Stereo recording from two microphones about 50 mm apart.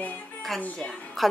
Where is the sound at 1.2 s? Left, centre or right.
Centre.